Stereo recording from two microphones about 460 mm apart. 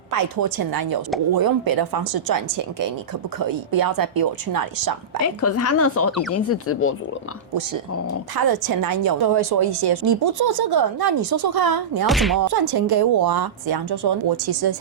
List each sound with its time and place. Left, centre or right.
0.1 s a woman's voice: right
5.2 s speech: left
8.4 s a woman's voice: right
12.0 s speech: centre
12.4 s a woman's voice: right